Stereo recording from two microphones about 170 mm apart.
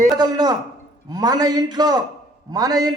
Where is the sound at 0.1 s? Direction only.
25° right (ahead or behind).